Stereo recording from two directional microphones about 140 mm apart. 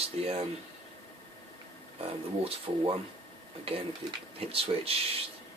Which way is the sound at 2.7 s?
35° right (ahead or behind).